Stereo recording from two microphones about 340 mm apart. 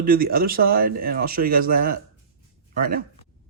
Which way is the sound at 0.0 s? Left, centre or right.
Right.